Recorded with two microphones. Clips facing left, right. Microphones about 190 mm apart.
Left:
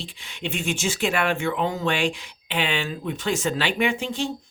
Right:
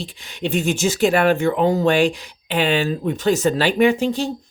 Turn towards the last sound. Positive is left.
turn(degrees=-35)  # may be behind; listen again after turning